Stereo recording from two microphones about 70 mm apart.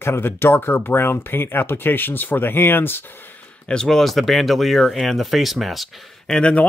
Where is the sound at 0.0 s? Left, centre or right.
Left.